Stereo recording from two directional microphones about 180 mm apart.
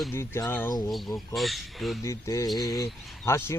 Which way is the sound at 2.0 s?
15° left (ahead or behind).